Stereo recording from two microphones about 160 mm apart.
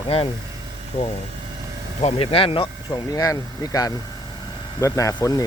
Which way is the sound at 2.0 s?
35° left (ahead or behind).